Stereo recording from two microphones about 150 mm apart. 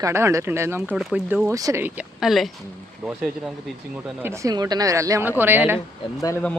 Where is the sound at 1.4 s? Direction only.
20° right (ahead or behind).